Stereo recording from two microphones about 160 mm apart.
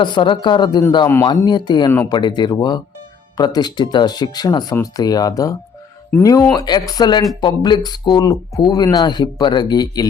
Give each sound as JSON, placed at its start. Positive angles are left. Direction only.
{"t": 0.0, "sound": "speech", "side_deg": 30}